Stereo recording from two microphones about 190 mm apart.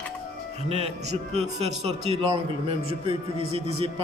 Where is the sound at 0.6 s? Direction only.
30° right (ahead or behind).